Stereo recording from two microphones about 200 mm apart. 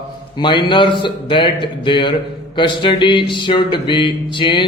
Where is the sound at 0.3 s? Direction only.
25° left (ahead or behind).